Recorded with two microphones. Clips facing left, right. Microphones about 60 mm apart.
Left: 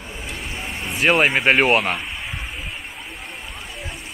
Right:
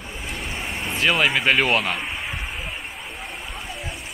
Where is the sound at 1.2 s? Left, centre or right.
Left.